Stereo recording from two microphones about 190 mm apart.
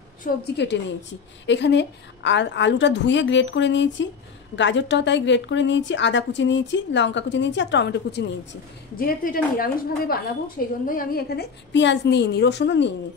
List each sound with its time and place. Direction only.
0.2 s a woman's voice: 45° left (ahead or behind)
1.4 s a woman's voice: 70° left (ahead or behind)
8.9 s a woman's voice: 50° left (ahead or behind); by 12.9 s 70° left (ahead or behind)